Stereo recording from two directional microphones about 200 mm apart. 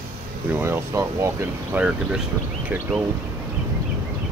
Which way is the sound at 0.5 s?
10° right (ahead or behind).